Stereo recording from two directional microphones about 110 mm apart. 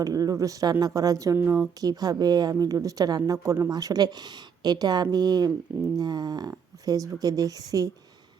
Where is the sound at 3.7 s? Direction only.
35° right (ahead or behind).